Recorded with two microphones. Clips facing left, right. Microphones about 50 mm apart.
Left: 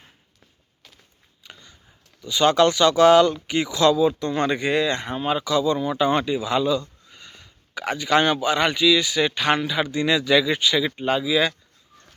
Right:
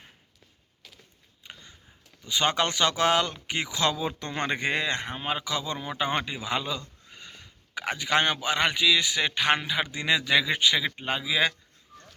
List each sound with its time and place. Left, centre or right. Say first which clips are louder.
1.5 s a sound: left 1 dB; centre
2.2 s speech: left 8 dB; centre
3.9 s speech: left 10 dB; right
5.0 s speech: left 7 dB; centre; by 6.8 s right
7.8 s speech: left 5 dB; centre